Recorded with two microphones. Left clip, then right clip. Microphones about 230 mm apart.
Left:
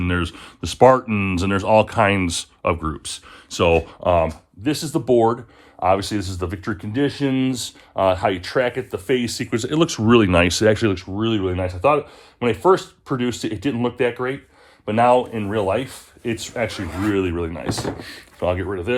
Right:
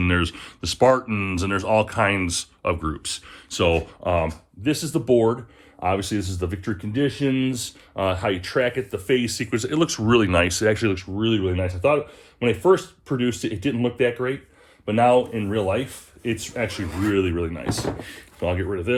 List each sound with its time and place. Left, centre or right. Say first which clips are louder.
0.0 s speech: right 1 dB; centre
3.8 s speech: left 5 dB; left